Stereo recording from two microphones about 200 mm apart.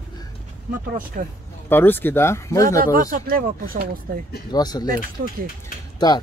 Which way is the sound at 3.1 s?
45° right (ahead or behind).